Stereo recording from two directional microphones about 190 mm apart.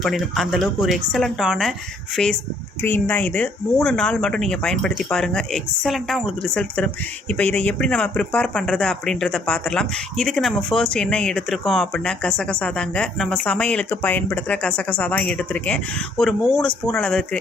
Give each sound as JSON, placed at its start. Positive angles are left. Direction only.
{"t": 0.0, "sound": "speech", "side_deg": 0}